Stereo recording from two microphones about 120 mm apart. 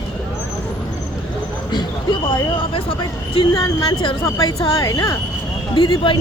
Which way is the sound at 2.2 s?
40° left (ahead or behind).